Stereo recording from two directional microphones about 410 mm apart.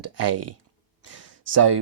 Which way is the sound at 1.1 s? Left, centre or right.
Right.